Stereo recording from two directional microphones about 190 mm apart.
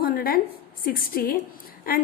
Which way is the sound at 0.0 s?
50° left (ahead or behind).